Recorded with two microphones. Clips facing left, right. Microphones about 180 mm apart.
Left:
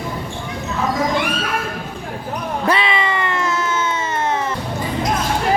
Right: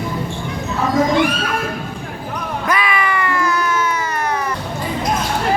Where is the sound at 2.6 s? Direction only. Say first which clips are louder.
Left 1 dB; 25° left (ahead or behind).